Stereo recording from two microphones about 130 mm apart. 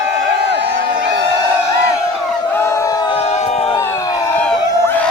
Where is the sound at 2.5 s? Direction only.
20° left (ahead or behind).